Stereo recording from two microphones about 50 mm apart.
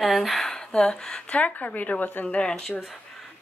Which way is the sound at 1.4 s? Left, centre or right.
Left.